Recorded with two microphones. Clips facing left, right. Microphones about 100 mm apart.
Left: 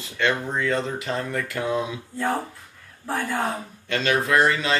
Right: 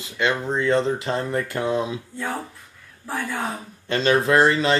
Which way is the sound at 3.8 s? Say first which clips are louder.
Right 4 dB; 30° right (ahead or behind).